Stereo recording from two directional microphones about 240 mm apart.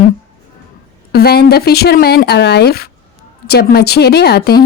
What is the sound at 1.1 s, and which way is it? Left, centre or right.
Speech, left.